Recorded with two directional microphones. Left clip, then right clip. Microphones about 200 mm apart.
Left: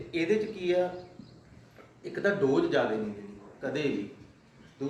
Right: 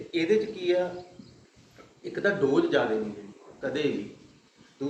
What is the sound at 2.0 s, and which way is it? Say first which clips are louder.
A man's voice: right 2 dB; 20° left (ahead or behind).